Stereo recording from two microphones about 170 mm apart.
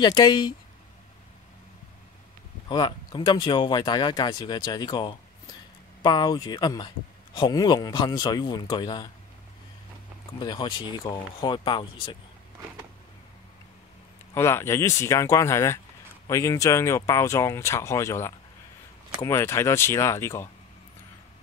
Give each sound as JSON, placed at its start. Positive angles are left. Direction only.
{"t": 0.0, "sound": "speech", "side_deg": 25}
{"t": 2.7, "sound": "speech", "side_deg": 30}
{"t": 10.4, "sound": "speech", "side_deg": 25}
{"t": 14.3, "sound": "speech", "side_deg": 15}